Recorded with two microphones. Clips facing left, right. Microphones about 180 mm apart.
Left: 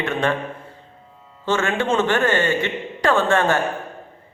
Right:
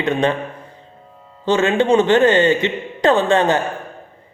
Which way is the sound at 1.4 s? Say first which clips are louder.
Right 6 dB; 20° right (ahead or behind).